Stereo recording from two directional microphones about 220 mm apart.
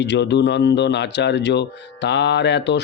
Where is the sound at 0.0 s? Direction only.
50° left (ahead or behind).